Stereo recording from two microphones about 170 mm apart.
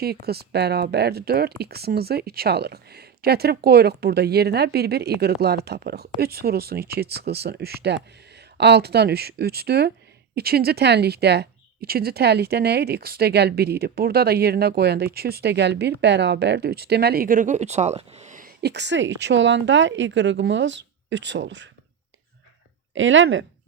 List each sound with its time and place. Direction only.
0.0 s speech: 65° right (ahead or behind); by 18.5 s 50° right (ahead or behind)
18.6 s speech: 90° right
23.0 s speech: 90° right